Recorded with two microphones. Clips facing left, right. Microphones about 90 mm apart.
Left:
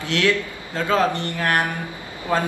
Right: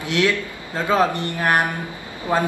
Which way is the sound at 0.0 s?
20° right (ahead or behind).